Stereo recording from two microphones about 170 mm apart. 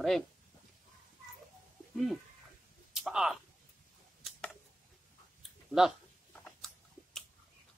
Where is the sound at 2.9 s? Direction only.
5° right (ahead or behind).